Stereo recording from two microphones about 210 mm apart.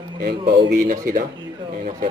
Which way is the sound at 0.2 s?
50° right (ahead or behind).